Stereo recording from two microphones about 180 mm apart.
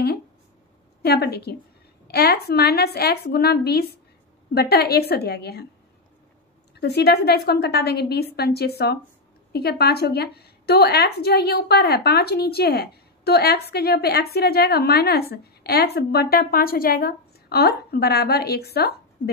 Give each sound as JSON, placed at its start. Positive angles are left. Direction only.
{"t": 1.0, "sound": "a woman's voice", "side_deg": 65}
{"t": 6.7, "sound": "a woman's voice", "side_deg": 65}